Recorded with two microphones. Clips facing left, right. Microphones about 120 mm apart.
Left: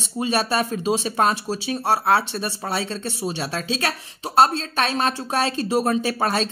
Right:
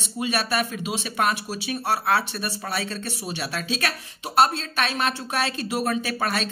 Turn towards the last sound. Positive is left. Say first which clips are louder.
# left 4 dB
turn(degrees=30)  # may be behind; listen again after turning